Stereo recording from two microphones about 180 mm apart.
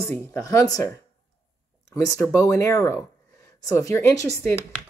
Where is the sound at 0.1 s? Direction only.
15° left (ahead or behind).